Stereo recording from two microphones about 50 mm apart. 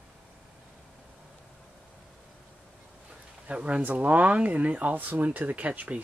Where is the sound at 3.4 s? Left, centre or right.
Right.